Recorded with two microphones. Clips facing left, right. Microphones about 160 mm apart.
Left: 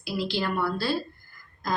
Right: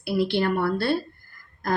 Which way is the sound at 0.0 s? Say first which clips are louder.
Right 6 dB; 60° right (ahead or behind).